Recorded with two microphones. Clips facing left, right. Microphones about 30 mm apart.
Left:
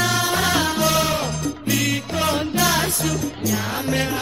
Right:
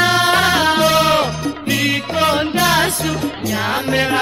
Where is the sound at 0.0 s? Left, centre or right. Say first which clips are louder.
Right 7 dB; right.